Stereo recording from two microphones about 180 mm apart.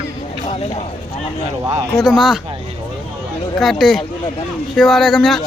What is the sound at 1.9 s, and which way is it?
Speech, centre (ahead or behind).